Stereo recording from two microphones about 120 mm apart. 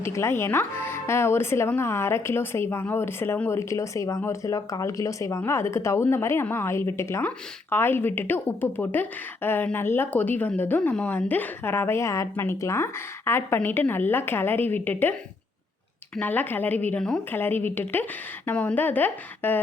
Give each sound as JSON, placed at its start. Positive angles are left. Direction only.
{"t": 0.0, "sound": "a woman's voice", "side_deg": 20}
{"t": 16.1, "sound": "a woman's voice", "side_deg": 15}